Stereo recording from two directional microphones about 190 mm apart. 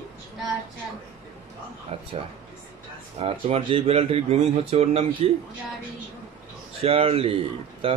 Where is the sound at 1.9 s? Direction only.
30° right (ahead or behind).